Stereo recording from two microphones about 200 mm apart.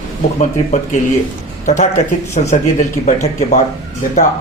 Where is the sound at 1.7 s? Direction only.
35° left (ahead or behind).